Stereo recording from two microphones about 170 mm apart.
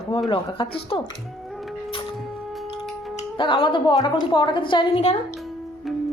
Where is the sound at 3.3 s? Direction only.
30° left (ahead or behind).